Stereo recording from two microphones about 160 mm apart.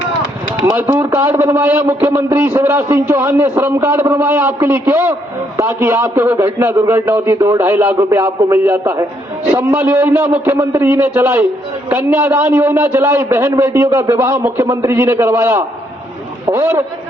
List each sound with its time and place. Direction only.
0.6 s a man's voice: 15° right (ahead or behind)